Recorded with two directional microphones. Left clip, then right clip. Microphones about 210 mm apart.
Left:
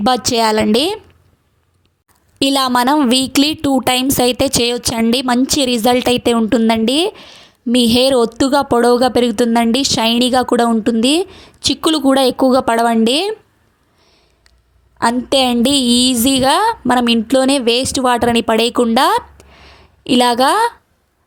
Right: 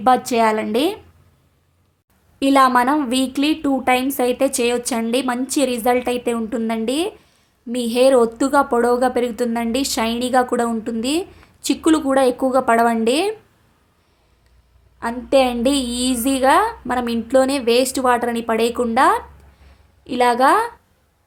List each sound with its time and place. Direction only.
0.0 s speech: 40° left (ahead or behind)
2.4 s speech: 40° left (ahead or behind)
14.9 s speech: 40° left (ahead or behind)